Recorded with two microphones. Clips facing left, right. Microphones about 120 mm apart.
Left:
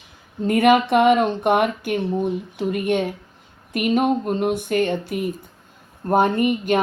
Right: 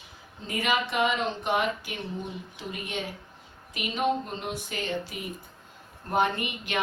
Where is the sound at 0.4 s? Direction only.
55° left (ahead or behind).